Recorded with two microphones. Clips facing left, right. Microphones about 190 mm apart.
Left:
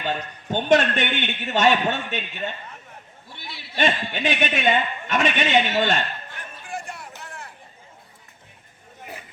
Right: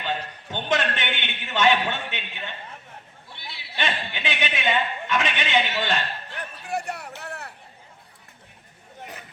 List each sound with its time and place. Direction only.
0.0 s a man's voice: 45° left (ahead or behind)
3.8 s a man's voice: 45° left (ahead or behind)
6.7 s a sound: 65° right (ahead or behind)